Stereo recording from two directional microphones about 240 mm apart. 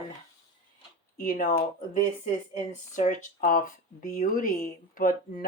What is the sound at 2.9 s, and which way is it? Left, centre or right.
Speech, left.